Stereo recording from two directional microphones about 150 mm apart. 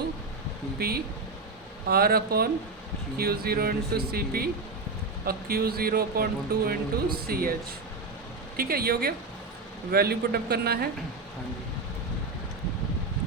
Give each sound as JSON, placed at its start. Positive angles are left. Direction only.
{"t": 0.8, "sound": "speech", "side_deg": -90}
{"t": 7.3, "sound": "speech", "side_deg": -75}
{"t": 8.5, "sound": "speech", "side_deg": -90}